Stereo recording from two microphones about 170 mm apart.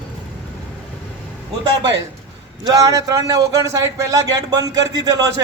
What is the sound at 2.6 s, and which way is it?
A man's voice, 20° right (ahead or behind).